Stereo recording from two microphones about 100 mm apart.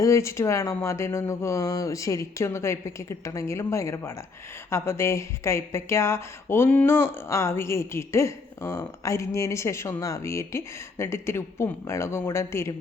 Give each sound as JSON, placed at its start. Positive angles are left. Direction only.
{"t": 0.0, "sound": "speech", "side_deg": 30}